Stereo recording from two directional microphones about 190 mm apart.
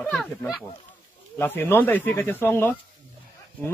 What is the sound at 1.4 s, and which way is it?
A man's voice, 10° left (ahead or behind).